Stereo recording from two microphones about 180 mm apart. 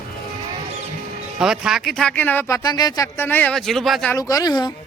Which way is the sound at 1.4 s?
5° right (ahead or behind).